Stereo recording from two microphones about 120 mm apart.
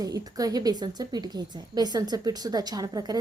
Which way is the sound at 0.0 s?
30° right (ahead or behind).